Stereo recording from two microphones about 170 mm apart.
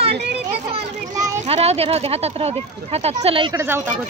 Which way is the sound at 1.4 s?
35° right (ahead or behind).